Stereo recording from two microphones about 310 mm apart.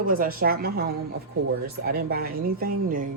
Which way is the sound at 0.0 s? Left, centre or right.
Right.